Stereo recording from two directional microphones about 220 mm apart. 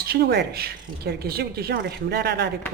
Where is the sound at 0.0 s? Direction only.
45° right (ahead or behind).